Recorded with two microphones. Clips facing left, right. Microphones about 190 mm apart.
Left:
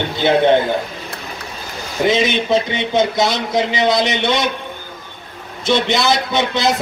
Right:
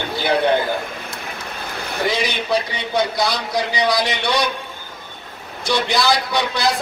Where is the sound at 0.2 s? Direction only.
25° left (ahead or behind).